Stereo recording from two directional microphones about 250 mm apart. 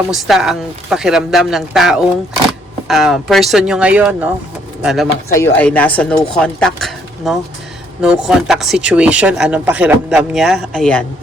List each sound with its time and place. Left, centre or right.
0.1 s speech: centre